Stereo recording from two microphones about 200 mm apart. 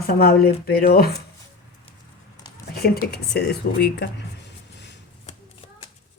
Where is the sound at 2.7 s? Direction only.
50° left (ahead or behind).